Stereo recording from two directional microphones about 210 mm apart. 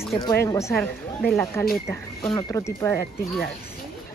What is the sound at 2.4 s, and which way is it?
Speech, 15° left (ahead or behind).